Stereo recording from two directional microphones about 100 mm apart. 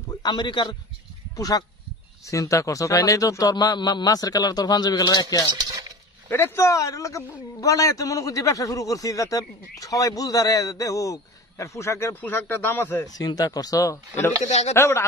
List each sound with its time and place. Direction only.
0.2 s a man's voice: 50° left (ahead or behind)
1.3 s a man's voice: 40° left (ahead or behind)
6.2 s a man's voice: 25° left (ahead or behind)
13.0 s a man's voice: 40° left (ahead or behind)